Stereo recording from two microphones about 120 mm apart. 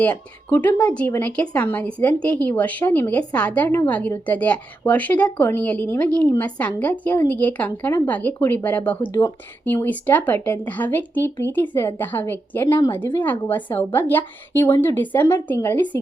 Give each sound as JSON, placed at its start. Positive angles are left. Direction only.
{"t": 0.0, "sound": "a woman's voice", "side_deg": 15}